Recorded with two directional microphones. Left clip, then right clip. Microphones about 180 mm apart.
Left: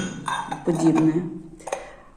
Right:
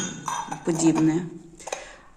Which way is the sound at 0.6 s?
30° right (ahead or behind).